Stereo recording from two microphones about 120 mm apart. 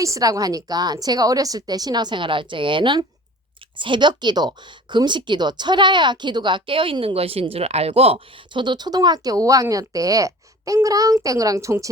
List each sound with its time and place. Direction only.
0.0 s speech: 30° right (ahead or behind)